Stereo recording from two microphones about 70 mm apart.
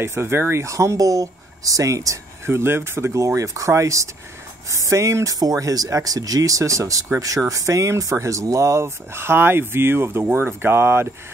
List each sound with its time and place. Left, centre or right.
0.0 s speech: right
2.4 s speech: right